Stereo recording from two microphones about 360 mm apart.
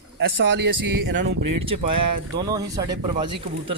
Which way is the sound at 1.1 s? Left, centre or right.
Right.